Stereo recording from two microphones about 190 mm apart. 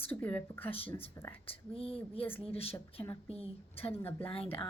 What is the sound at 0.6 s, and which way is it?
A woman's voice, 30° left (ahead or behind).